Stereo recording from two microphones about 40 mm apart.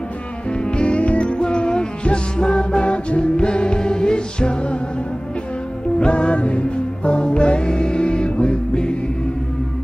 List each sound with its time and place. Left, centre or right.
0.5 s music: left
5.9 s music: left